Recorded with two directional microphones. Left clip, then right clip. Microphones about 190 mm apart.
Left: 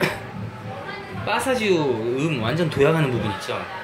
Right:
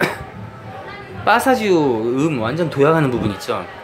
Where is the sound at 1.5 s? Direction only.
90° right.